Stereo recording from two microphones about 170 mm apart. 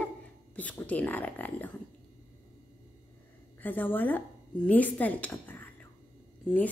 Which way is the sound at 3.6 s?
10° left (ahead or behind).